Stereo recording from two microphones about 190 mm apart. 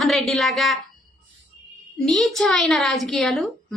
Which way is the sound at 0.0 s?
Centre (ahead or behind).